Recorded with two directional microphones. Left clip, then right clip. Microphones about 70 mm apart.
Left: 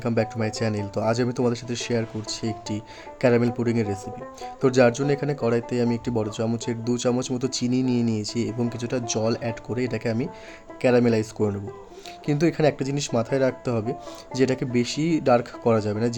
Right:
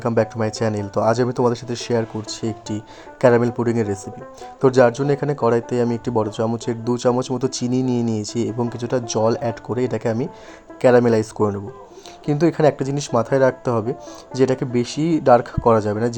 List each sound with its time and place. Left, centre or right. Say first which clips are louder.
0.2 s speech: right 6 dB; right
5.8 s speech: right 5 dB; right
12.2 s speech: right 5 dB; centre